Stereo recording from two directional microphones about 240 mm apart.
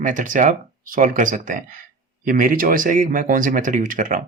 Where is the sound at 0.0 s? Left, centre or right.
Right.